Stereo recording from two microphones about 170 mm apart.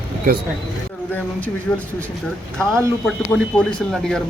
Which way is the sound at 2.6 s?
15° right (ahead or behind).